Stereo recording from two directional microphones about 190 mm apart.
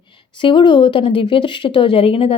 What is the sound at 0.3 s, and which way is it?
Speech, 25° left (ahead or behind).